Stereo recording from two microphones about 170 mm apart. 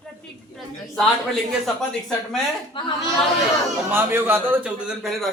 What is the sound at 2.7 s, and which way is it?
Speech, 30° left (ahead or behind).